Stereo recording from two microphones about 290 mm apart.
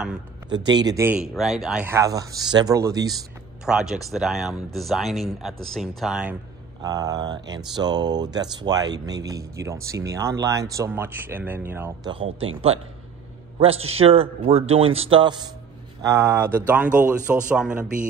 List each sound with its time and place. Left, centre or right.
0.5 s speech: centre
3.6 s speech: centre
6.8 s speech: centre
13.6 s a man's voice: centre